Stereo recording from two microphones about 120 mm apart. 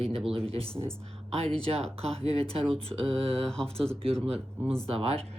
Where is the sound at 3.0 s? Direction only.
50° right (ahead or behind).